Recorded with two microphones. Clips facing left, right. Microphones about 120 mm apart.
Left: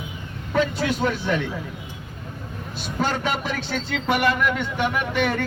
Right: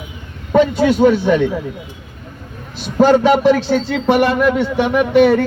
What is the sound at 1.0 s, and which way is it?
Speech, 45° right (ahead or behind).